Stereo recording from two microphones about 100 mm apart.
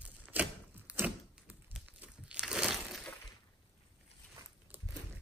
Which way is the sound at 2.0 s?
10° right (ahead or behind).